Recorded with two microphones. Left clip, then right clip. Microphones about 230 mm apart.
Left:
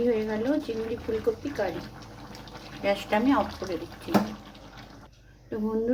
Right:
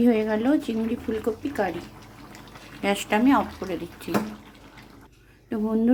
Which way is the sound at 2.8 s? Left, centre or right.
Right.